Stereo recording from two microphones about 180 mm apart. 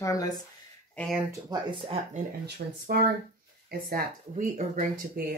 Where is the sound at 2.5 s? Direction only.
65° right (ahead or behind).